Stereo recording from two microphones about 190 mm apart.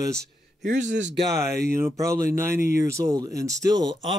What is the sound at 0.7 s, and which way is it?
Speech, 70° right (ahead or behind).